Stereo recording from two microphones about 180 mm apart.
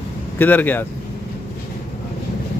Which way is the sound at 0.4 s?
10° left (ahead or behind).